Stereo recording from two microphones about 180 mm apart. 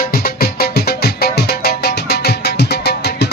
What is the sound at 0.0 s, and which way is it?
Music, 55° left (ahead or behind).